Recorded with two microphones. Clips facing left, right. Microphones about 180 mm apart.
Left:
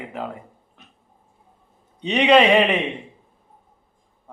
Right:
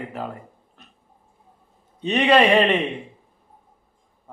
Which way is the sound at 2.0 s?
20° left (ahead or behind).